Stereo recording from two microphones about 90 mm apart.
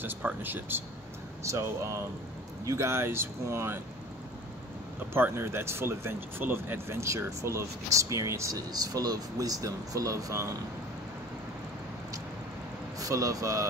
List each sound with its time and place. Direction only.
0.0 s speech: 20° right (ahead or behind)
1.4 s speech: 35° right (ahead or behind)
5.1 s speech: 25° right (ahead or behind)
8.7 s speech: 45° right (ahead or behind)
13.0 s speech: 40° right (ahead or behind)